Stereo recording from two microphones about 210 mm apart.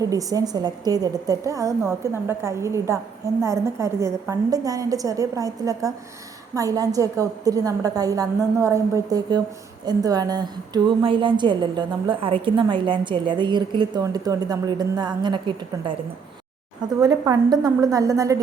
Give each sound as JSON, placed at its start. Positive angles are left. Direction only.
{"t": 0.0, "sound": "a woman's voice", "side_deg": -15}
{"t": 17.0, "sound": "a woman's voice", "side_deg": -15}